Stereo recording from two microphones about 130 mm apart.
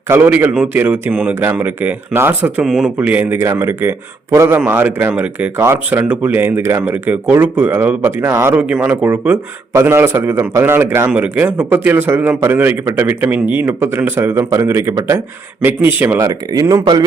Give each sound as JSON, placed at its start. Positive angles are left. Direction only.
{"t": 0.1, "sound": "speech", "side_deg": -15}
{"t": 2.6, "sound": "speech", "side_deg": 0}
{"t": 3.2, "sound": "speech", "side_deg": -15}